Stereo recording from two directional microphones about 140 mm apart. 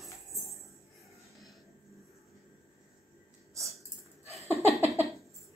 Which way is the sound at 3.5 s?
20° right (ahead or behind).